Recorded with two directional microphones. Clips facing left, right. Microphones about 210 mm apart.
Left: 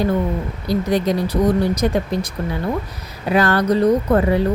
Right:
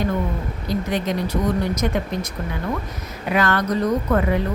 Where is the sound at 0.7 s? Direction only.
35° left (ahead or behind).